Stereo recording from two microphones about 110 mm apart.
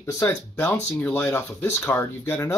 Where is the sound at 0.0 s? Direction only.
25° left (ahead or behind).